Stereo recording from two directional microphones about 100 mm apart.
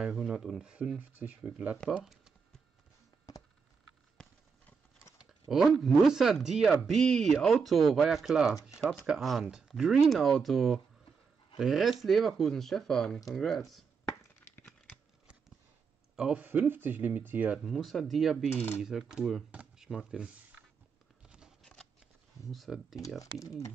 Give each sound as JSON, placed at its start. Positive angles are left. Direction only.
{"t": 0.0, "sound": "speech", "side_deg": -10}
{"t": 5.5, "sound": "speech", "side_deg": -5}
{"t": 13.7, "sound": "chopping", "side_deg": 0}
{"t": 14.4, "sound": "crumpling", "side_deg": 20}
{"t": 16.2, "sound": "speech", "side_deg": -10}
{"t": 17.6, "sound": "speech", "side_deg": 0}
{"t": 18.5, "sound": "speech", "side_deg": 20}
{"t": 18.8, "sound": "speech", "side_deg": -5}
{"t": 21.3, "sound": "scissors", "side_deg": -10}
{"t": 22.5, "sound": "speech", "side_deg": 0}